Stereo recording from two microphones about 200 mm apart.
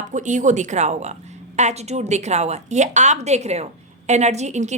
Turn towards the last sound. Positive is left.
turn(degrees=-35)  # may be behind; listen again after turning